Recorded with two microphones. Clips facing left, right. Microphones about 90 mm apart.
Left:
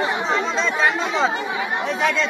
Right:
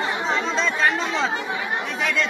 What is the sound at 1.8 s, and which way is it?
Chatter, 30° left (ahead or behind).